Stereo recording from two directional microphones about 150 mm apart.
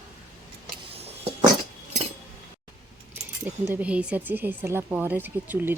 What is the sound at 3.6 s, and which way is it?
Speech, 10° right (ahead or behind).